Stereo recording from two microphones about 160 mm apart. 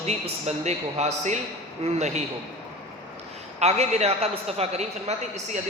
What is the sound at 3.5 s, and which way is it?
A man's voice, 45° right (ahead or behind).